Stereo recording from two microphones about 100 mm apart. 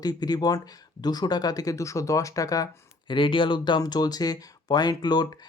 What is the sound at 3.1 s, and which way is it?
Speech, 55° left (ahead or behind).